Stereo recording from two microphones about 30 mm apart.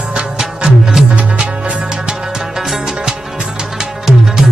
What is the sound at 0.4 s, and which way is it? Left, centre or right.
Music, right.